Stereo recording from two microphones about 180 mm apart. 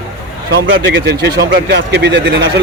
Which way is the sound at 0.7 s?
70° right (ahead or behind).